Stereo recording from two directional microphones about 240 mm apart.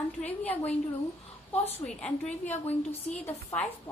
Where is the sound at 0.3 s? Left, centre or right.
Centre.